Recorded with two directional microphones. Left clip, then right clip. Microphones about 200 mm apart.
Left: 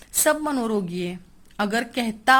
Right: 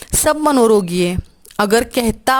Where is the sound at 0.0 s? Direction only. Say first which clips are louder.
Right 7 dB; 50° right (ahead or behind).